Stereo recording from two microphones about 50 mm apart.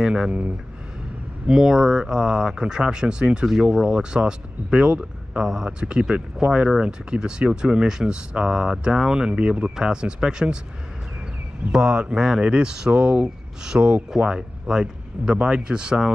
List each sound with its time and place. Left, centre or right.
0.0 s speech: centre
1.5 s speech: centre
5.4 s speech: centre
11.7 s speech: centre